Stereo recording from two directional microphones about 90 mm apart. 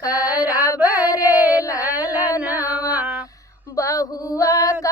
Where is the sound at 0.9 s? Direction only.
40° left (ahead or behind).